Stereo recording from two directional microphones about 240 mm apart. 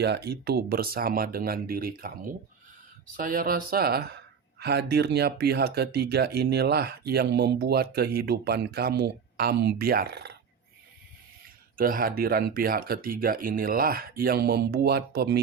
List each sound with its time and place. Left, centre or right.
0.0 s speech: right
11.8 s speech: right